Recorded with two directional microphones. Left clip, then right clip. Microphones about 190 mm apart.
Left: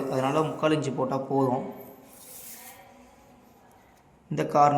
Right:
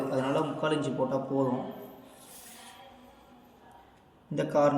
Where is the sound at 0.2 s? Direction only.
50° left (ahead or behind).